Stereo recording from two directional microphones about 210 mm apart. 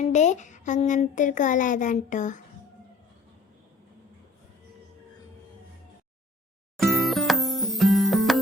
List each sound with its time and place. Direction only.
0.0 s speech: 35° left (ahead or behind)
6.7 s music: centre (ahead or behind)